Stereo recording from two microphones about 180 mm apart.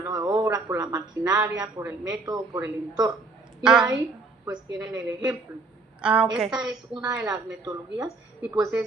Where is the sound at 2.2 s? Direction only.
20° right (ahead or behind).